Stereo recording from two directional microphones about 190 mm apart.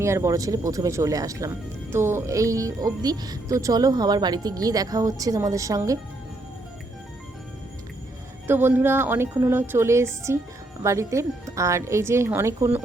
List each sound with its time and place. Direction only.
0.0 s speech: 15° right (ahead or behind)
8.4 s speech: 10° right (ahead or behind)